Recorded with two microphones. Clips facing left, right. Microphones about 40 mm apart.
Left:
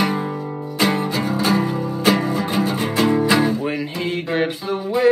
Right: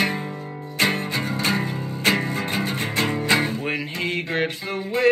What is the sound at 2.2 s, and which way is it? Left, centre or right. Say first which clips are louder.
Music: left 5 dB; right.